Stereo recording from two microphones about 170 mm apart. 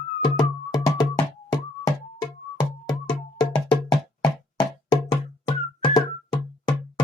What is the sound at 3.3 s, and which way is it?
Music, 20° left (ahead or behind).